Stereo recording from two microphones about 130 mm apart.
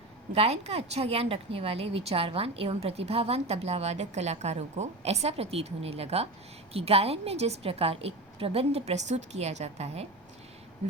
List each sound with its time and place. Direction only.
0.3 s speech: 55° right (ahead or behind)